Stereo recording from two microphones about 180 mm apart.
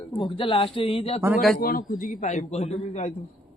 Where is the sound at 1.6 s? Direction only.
55° left (ahead or behind); by 3.1 s 35° left (ahead or behind).